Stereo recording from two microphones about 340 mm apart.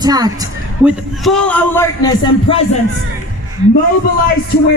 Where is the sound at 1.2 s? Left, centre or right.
Centre.